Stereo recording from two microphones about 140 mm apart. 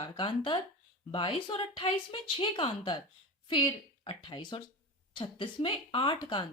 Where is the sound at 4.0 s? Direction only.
35° left (ahead or behind).